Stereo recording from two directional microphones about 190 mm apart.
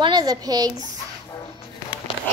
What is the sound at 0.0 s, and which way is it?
Speech, 20° right (ahead or behind).